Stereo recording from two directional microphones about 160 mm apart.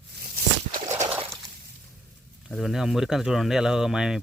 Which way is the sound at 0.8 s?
45° right (ahead or behind).